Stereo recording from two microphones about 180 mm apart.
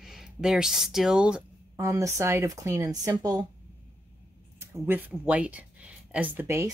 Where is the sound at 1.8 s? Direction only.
15° right (ahead or behind).